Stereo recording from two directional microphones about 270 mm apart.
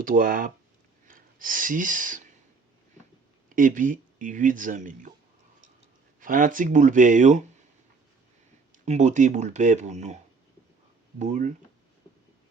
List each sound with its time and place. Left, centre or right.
0.0 s speech: right
3.5 s speech: right
6.1 s speech: right
8.7 s speech: right
11.2 s speech: right